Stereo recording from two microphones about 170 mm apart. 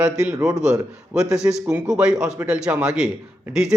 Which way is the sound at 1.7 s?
5° right (ahead or behind).